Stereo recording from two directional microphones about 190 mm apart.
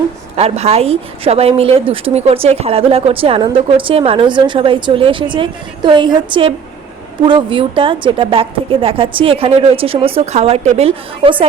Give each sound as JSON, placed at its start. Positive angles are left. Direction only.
{"t": 0.3, "sound": "a woman's voice", "side_deg": -35}